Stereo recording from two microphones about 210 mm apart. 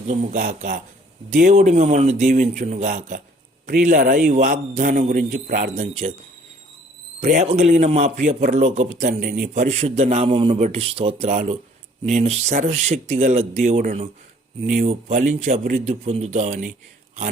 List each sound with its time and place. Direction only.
0.1 s a man's voice: 35° right (ahead or behind)
7.2 s a man's voice: 40° right (ahead or behind)